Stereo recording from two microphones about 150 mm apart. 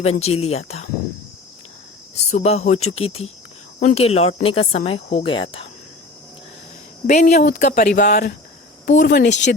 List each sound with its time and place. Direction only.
0.0 s speech: 45° left (ahead or behind)
2.3 s speech: 45° left (ahead or behind)
7.1 s speech: 55° left (ahead or behind); by 8.3 s 90° left
8.9 s speech: 60° left (ahead or behind)